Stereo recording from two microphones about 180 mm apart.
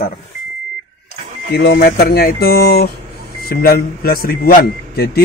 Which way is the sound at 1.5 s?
70° left (ahead or behind).